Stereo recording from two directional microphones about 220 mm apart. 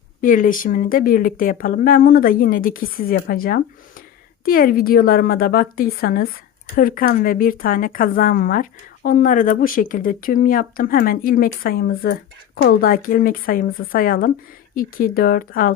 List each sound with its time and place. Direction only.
0.2 s speech: 40° left (ahead or behind)